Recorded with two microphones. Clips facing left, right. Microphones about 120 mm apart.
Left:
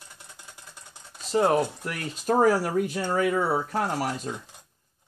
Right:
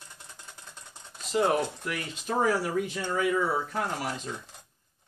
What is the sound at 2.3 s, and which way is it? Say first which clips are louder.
Speech: left 5 dB; 40° left (ahead or behind).